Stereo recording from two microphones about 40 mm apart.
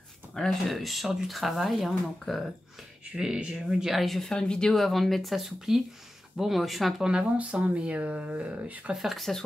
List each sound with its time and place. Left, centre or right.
0.3 s speech: centre
0.7 s speech: centre
3.1 s speech: centre
4.0 s speech: centre
4.3 s speech: left
4.7 s speech: centre
7.0 s speech: centre
7.3 s speech: right
8.9 s speech: centre